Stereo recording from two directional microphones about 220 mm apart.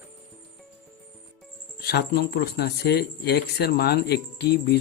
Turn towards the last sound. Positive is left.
turn(degrees=45)  # may be behind; listen again after turning